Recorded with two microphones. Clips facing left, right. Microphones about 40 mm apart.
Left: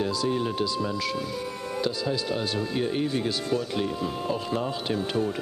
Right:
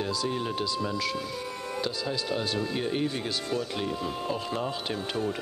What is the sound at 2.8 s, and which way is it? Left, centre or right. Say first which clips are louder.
Speech: left 3 dB; centre.